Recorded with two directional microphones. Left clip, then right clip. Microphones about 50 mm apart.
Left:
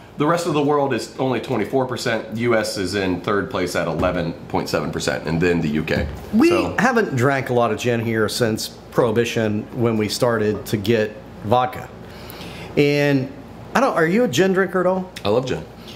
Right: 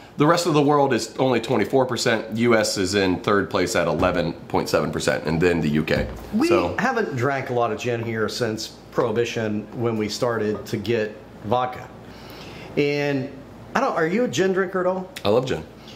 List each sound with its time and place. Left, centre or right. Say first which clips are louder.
0.5 s speech: even; left
6.7 s speech: left 4 dB; centre
15.2 s speech: even; left